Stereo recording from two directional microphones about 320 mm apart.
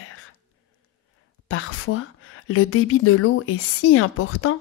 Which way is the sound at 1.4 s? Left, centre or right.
Left.